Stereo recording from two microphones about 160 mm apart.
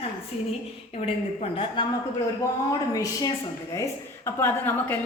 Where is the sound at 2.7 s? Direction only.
25° left (ahead or behind).